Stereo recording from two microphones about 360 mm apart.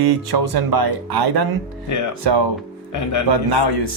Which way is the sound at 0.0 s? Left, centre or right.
Right.